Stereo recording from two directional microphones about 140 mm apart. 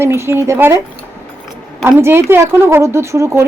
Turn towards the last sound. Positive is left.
turn(degrees=-20)  # may be behind; listen again after turning